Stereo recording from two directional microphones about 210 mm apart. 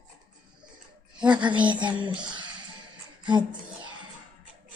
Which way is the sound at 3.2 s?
20° right (ahead or behind).